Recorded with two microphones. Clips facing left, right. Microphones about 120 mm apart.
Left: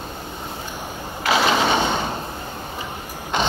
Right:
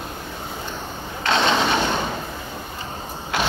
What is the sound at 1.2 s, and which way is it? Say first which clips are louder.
Sewing machine: left 1 dB; 5° left (ahead or behind).